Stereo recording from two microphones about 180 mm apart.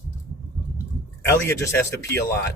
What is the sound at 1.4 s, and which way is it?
Speech, 15° left (ahead or behind).